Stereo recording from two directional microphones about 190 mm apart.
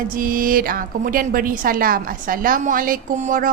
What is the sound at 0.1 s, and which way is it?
Speech, 50° right (ahead or behind).